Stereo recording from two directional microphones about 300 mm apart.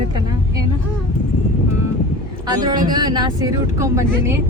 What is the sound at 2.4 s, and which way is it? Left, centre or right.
Speech, centre.